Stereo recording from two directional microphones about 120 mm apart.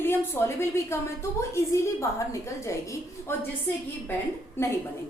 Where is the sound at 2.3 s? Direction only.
25° left (ahead or behind).